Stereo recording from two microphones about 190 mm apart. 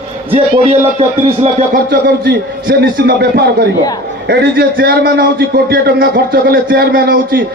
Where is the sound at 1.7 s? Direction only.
50° right (ahead or behind).